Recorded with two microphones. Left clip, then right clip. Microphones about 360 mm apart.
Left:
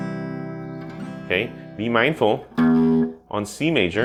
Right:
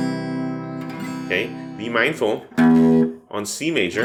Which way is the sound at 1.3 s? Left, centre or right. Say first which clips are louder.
Even; left.